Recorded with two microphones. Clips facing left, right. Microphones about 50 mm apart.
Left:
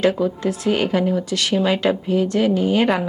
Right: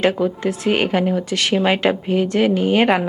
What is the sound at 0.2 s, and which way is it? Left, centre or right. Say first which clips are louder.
A woman's voice: right 1 dB; right.